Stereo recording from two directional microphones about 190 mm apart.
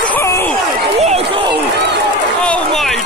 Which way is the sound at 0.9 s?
35° right (ahead or behind).